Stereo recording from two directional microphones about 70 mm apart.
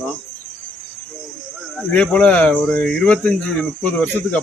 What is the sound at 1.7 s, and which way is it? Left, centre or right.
Speech, centre.